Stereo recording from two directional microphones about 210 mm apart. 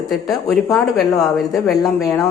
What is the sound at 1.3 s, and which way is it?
Speech, centre (ahead or behind).